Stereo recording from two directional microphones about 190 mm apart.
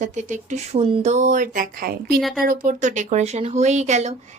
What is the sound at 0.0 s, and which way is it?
Speech, 40° right (ahead or behind).